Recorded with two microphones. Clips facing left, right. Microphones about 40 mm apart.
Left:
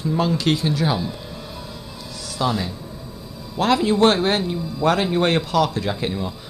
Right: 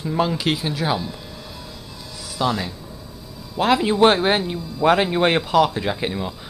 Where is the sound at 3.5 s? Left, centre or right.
Centre.